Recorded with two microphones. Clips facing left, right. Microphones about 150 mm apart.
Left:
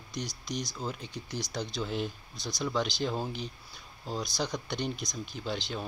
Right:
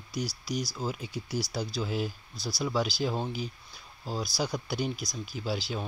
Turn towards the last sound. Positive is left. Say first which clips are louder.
# right 2 dB
turn(degrees=-5)  # may be behind; listen again after turning